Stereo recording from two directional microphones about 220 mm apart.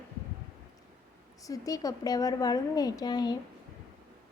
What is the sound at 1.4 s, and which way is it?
Speech, 15° left (ahead or behind).